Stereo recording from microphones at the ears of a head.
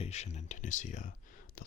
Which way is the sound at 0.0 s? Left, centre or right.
Left.